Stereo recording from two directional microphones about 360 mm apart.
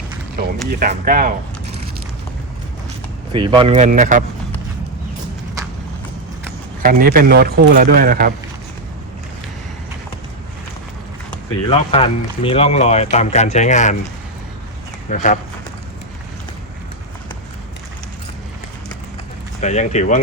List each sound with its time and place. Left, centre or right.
0.3 s a man's voice: right
3.3 s a man's voice: centre
6.8 s a man's voice: right
11.7 s speech: centre
15.1 s speech: left
19.6 s speech: centre